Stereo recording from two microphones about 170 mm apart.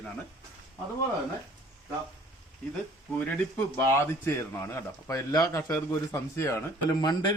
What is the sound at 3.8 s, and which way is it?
A man's voice, 15° left (ahead or behind).